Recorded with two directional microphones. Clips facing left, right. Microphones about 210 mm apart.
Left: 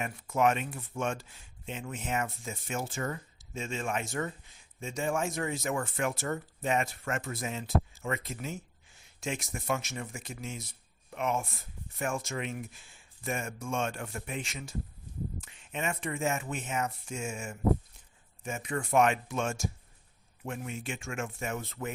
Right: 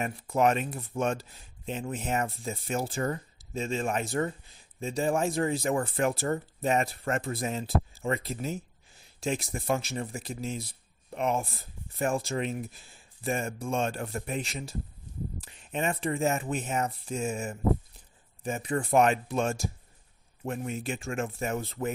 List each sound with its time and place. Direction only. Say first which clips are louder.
0.0 s speech: right 2 dB; 35° right (ahead or behind)